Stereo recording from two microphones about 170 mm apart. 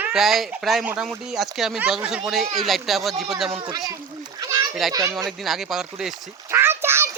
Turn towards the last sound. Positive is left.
turn(degrees=-15)  # may be behind; listen again after turning